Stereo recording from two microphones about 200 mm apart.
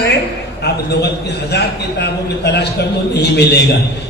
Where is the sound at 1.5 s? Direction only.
55° left (ahead or behind).